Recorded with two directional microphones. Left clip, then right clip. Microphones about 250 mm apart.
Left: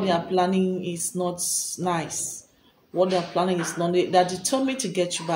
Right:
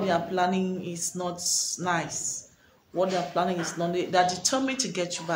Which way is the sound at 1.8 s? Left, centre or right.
Centre.